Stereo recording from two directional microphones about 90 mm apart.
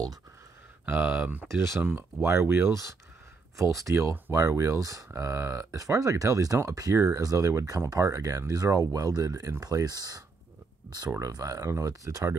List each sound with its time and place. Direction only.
0.8 s speech: 20° right (ahead or behind); by 12.4 s 35° right (ahead or behind)